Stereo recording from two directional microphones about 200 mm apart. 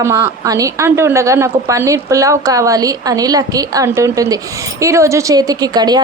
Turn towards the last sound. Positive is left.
turn(degrees=-20)  # may be behind; listen again after turning